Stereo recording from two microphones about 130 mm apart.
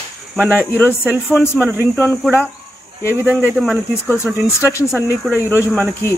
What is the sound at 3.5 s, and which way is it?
Speech, 5° right (ahead or behind).